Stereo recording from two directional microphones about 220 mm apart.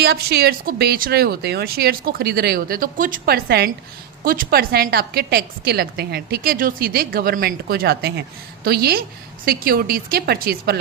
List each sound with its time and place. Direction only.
0.0 s a woman's voice: 45° right (ahead or behind)